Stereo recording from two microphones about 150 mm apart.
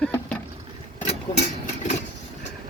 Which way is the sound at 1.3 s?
25° left (ahead or behind).